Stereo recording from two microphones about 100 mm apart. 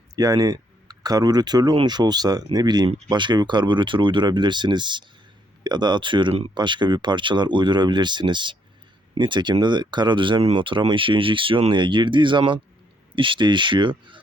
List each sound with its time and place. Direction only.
0.2 s speech: 40° right (ahead or behind); by 14.2 s 55° right (ahead or behind)